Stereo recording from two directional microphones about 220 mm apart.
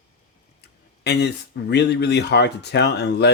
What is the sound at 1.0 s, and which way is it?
Speech, 50° left (ahead or behind).